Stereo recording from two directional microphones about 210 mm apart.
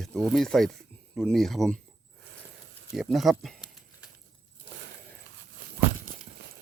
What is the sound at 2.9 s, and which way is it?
Speech, centre (ahead or behind).